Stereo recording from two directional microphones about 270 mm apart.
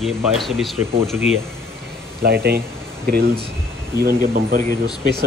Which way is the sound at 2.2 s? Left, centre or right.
Right.